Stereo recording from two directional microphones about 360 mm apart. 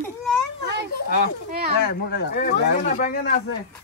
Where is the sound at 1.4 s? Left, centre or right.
Right.